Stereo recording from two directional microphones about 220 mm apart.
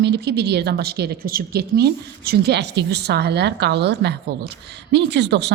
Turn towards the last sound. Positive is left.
turn(degrees=-50)  # may be behind; listen again after turning